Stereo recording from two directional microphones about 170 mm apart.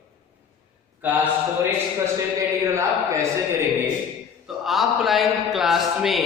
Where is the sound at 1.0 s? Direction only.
10° right (ahead or behind).